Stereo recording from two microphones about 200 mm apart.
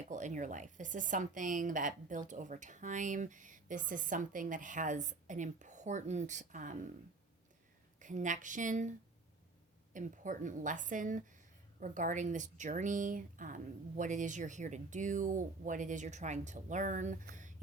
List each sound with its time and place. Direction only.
0.1 s speech: 40° right (ahead or behind)
7.9 s speech: 40° right (ahead or behind)